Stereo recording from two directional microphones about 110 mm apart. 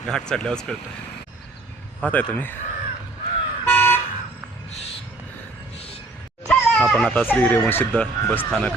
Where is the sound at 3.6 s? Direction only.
20° left (ahead or behind).